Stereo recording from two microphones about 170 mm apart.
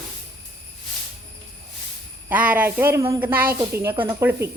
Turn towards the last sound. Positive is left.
turn(degrees=-15)  # may be behind; listen again after turning